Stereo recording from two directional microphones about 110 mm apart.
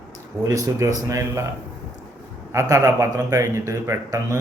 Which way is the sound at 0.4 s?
30° right (ahead or behind).